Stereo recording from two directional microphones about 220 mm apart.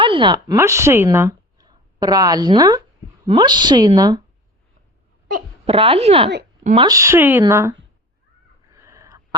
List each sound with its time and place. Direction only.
0.0 s a woman's voice: 25° right (ahead or behind)
5.6 s a woman's voice: 25° right (ahead or behind)
6.8 s speech: 15° right (ahead or behind)
8.7 s a sound: 15° right (ahead or behind)